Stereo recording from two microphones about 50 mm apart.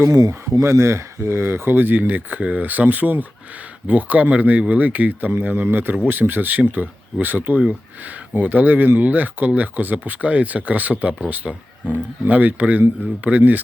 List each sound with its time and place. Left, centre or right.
0.0 s speech: right
5.6 s speech: right